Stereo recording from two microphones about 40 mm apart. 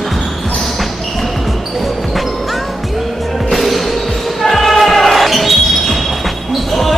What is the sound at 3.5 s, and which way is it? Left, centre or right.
Music, centre.